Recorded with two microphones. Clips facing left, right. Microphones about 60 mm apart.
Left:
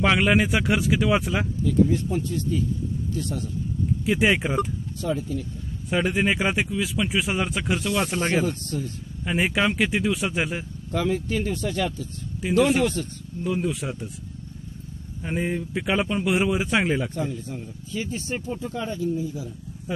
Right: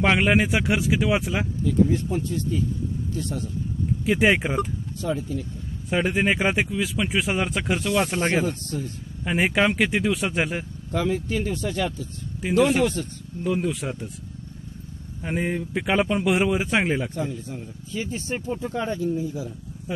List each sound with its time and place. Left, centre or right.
0.0 s speech: right
4.0 s speech: right
5.0 s speech: centre
5.9 s speech: right
8.1 s a man's voice: right
8.7 s speech: centre
9.2 s speech: right
10.9 s speech: centre
13.4 s speech: right
15.2 s speech: right
16.5 s a man's voice: right
17.0 s speech: centre
18.6 s a man's voice: right